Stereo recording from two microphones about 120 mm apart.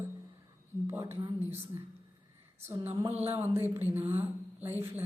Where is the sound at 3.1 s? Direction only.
60° right (ahead or behind).